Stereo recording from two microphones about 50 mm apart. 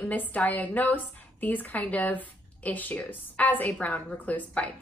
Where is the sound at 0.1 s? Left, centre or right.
Left.